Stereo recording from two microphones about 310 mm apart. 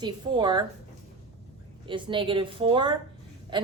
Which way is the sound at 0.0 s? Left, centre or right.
Centre.